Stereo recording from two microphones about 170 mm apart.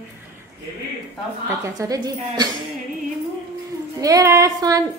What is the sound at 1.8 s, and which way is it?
Speech, 25° right (ahead or behind).